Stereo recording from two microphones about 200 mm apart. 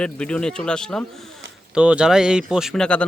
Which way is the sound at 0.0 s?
5° left (ahead or behind).